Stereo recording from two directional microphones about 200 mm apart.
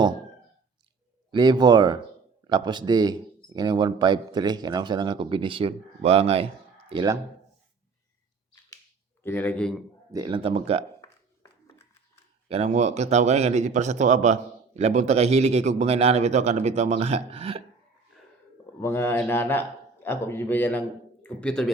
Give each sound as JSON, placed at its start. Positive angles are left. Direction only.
{"t": 1.3, "sound": "speech", "side_deg": -20}
{"t": 9.2, "sound": "a man's voice", "side_deg": 10}
{"t": 10.1, "sound": "speech", "side_deg": -20}
{"t": 12.5, "sound": "speech", "side_deg": -35}
{"t": 18.8, "sound": "a man's voice", "side_deg": 10}